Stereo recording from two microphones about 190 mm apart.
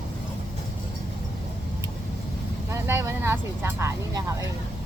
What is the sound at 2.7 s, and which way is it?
Speech, 15° right (ahead or behind).